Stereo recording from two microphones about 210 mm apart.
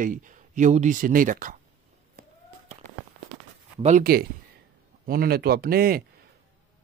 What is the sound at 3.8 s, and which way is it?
Speech, 40° right (ahead or behind).